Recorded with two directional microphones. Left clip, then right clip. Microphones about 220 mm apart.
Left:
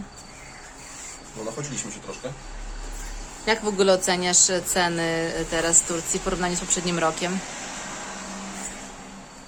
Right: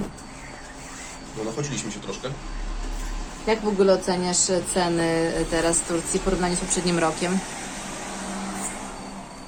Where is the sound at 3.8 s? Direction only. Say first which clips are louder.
Even; 35° left (ahead or behind).